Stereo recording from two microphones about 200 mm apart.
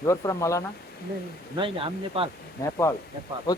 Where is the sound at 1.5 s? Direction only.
25° right (ahead or behind).